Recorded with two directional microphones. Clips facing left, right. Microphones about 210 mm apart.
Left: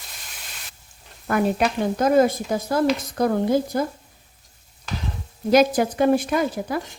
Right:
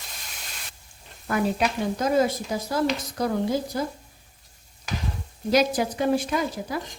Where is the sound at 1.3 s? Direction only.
55° left (ahead or behind).